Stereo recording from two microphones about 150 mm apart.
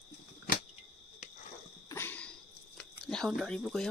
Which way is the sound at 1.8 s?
15° left (ahead or behind).